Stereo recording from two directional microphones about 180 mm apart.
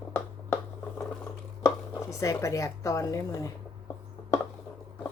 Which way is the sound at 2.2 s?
15° left (ahead or behind).